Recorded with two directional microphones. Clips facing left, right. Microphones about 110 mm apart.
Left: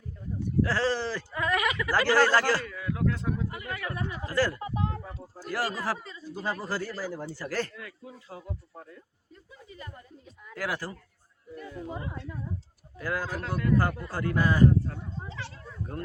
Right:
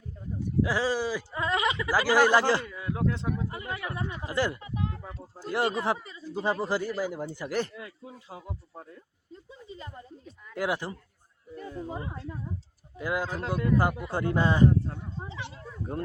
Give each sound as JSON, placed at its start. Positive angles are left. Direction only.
{"t": 0.6, "sound": "speech", "side_deg": -15}
{"t": 1.3, "sound": "speech", "side_deg": -25}
{"t": 1.9, "sound": "speech", "side_deg": -10}
{"t": 4.6, "sound": "a sound", "side_deg": 35}
{"t": 5.4, "sound": "speech", "side_deg": -20}
{"t": 8.9, "sound": "a sound", "side_deg": -25}
{"t": 10.5, "sound": "speech", "side_deg": -20}
{"t": 11.5, "sound": "speech", "side_deg": -30}
{"t": 13.0, "sound": "speech", "side_deg": -20}
{"t": 15.2, "sound": "a sound", "side_deg": -15}